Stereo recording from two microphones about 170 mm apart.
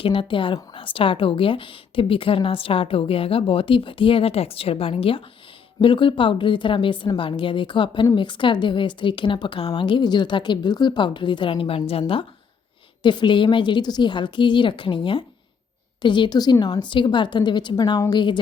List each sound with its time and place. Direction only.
0.0 s a woman's voice: 30° left (ahead or behind)